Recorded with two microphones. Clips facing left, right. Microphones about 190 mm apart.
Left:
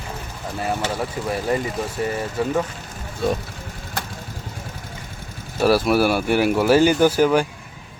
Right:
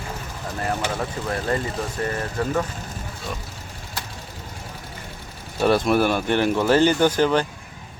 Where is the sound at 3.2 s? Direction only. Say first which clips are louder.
Left 12 dB; 60° left (ahead or behind).